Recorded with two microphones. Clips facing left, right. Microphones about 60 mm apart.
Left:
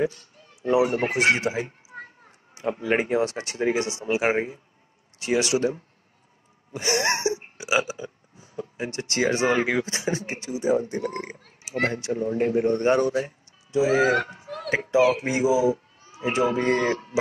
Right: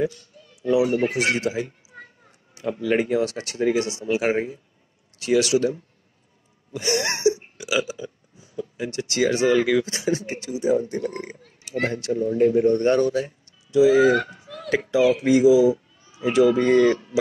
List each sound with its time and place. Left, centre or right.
0.0 s speech: left
6.7 s burping: left
8.0 s speech: left
11.4 s a sound: left
12.1 s speech: left